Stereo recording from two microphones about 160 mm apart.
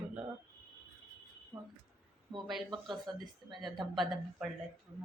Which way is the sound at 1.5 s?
30° right (ahead or behind).